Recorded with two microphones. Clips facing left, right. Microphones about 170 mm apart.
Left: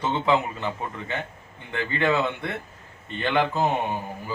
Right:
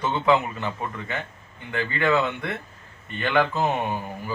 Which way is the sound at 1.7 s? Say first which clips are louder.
Right 1 dB; 25° left (ahead or behind).